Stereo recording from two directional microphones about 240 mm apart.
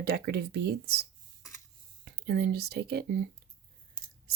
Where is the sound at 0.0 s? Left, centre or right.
Right.